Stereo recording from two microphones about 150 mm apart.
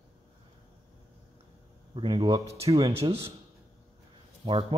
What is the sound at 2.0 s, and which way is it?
Speech, 35° right (ahead or behind).